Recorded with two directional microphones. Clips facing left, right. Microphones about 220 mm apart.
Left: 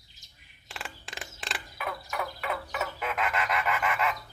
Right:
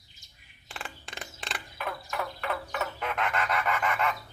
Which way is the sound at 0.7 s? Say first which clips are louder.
Even; centre (ahead or behind).